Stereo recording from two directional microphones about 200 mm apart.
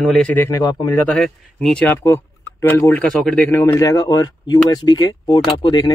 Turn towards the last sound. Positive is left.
turn(degrees=20)  # may be behind; listen again after turning